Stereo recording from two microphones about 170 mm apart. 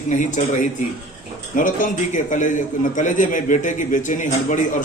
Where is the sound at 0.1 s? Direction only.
45° left (ahead or behind).